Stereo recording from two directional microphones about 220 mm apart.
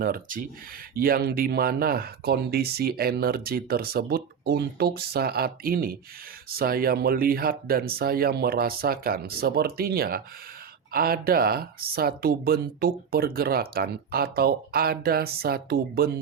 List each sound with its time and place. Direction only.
0.0 s speech: 40° right (ahead or behind)